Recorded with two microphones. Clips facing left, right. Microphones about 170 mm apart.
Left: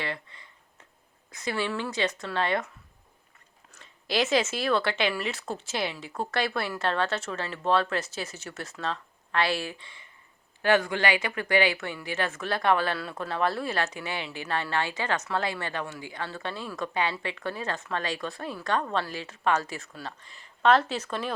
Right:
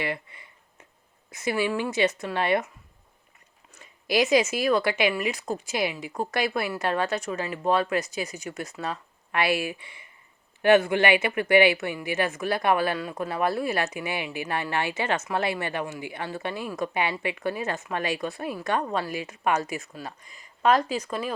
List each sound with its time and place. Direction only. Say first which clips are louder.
1.3 s a woman's voice: right 4 dB; 15° right (ahead or behind)
4.1 s a woman's voice: right 4 dB; 15° right (ahead or behind)